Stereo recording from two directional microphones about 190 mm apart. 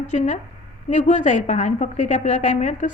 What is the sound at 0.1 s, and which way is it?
A woman's voice, 40° left (ahead or behind).